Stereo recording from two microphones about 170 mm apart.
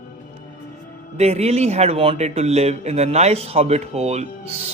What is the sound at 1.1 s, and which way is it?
Speech, 40° right (ahead or behind).